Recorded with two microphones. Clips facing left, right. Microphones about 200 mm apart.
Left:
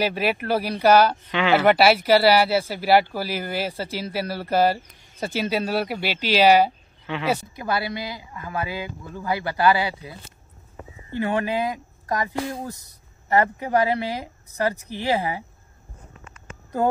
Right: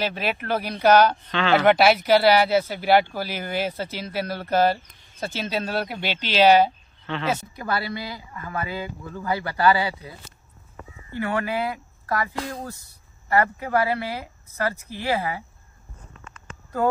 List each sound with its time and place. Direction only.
0.0 s speech: 10° left (ahead or behind)
11.1 s speech: 20° left (ahead or behind)